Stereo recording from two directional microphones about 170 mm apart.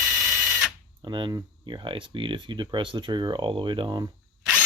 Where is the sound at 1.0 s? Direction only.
25° right (ahead or behind).